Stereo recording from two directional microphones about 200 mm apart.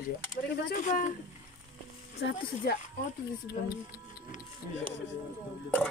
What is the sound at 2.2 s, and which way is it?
Speech, 65° left (ahead or behind).